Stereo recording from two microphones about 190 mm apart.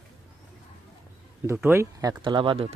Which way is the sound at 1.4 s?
10° right (ahead or behind).